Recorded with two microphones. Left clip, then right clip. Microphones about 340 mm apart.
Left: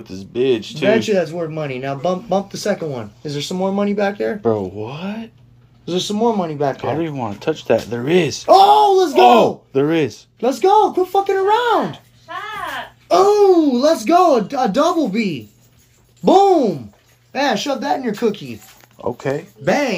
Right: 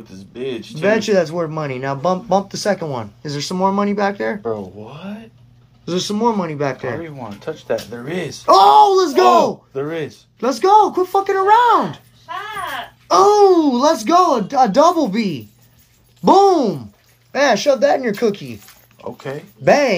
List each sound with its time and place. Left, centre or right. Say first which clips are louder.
0.0 s speech: left 8 dB; left
0.8 s a child's voice: right 1 dB; centre
4.5 s speech: left 6 dB; left
5.9 s a child's voice: even; centre
6.8 s speech: left 5 dB; left
8.5 s a child's voice: right 1 dB; centre
9.8 s speech: left 7 dB; left
10.4 s a child's voice: right 1 dB; centre
13.1 s a child's voice: right 1 dB; centre
19.0 s speech: left 7 dB; left
19.6 s a child's voice: right 5 dB; centre